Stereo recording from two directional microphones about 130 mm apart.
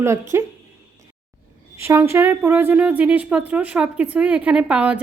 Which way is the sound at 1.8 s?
20° right (ahead or behind).